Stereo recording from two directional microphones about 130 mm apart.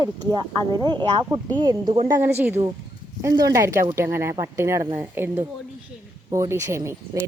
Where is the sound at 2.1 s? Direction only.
20° right (ahead or behind).